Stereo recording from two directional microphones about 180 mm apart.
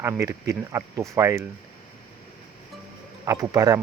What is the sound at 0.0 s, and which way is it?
Speech, 15° right (ahead or behind).